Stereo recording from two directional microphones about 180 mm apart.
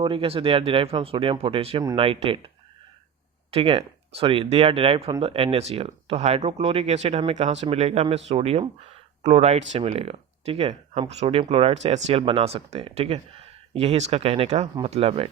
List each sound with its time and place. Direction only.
0.0 s speech: 30° right (ahead or behind)
3.5 s speech: 30° right (ahead or behind)